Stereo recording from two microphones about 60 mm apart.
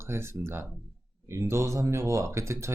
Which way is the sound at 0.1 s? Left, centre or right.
Right.